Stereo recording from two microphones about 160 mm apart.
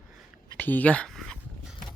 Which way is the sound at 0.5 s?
10° left (ahead or behind).